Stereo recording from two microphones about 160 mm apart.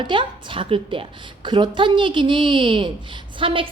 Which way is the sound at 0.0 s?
30° right (ahead or behind).